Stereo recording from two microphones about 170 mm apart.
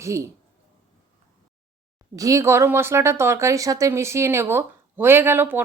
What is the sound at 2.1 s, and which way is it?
Speech, 20° right (ahead or behind).